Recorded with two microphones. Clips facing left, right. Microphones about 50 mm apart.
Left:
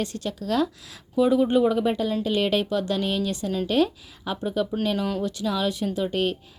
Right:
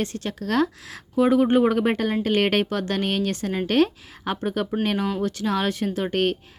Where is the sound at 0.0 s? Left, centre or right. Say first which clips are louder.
Right 1 dB; right.